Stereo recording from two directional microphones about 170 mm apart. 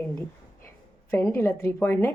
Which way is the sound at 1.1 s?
15° left (ahead or behind).